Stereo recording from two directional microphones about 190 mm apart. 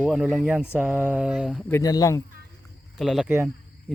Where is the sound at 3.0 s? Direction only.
Centre (ahead or behind).